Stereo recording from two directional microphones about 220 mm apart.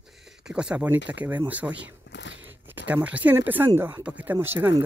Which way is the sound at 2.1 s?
55° left (ahead or behind).